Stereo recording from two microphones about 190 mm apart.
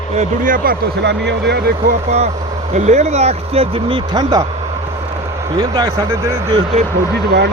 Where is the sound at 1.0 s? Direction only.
65° right (ahead or behind).